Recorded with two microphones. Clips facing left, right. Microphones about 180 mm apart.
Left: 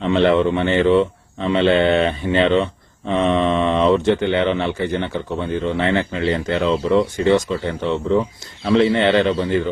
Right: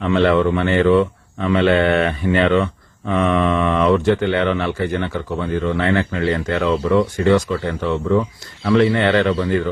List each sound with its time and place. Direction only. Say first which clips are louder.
0.0 s speech: even; 20° left (ahead or behind)